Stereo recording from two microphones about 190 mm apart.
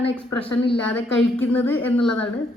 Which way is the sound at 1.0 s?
75° left (ahead or behind).